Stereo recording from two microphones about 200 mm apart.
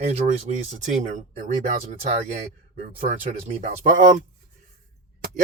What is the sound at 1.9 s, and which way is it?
Speech, 35° right (ahead or behind).